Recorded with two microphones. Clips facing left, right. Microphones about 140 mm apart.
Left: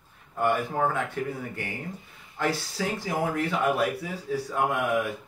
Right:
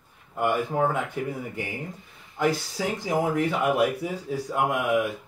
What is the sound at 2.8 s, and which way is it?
Speech, 15° right (ahead or behind).